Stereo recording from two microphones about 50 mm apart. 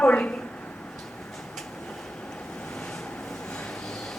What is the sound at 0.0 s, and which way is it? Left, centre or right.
Speech, left.